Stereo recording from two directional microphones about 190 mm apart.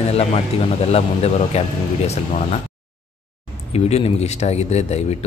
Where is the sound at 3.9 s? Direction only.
35° left (ahead or behind).